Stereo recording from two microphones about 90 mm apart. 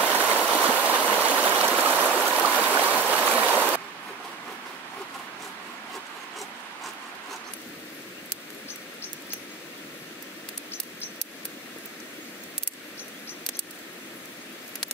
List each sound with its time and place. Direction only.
0.0 s stream: 20° left (ahead or behind)